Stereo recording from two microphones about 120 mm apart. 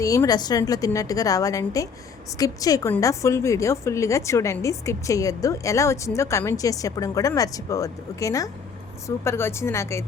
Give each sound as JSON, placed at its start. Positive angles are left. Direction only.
{"t": 0.0, "sound": "a woman's voice", "side_deg": 25}